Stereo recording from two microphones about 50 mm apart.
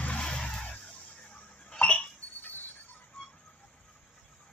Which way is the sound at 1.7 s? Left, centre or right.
Left.